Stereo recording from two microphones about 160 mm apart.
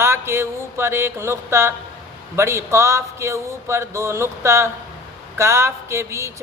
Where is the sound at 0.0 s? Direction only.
15° right (ahead or behind).